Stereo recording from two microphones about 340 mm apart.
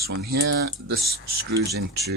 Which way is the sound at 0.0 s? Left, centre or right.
Right.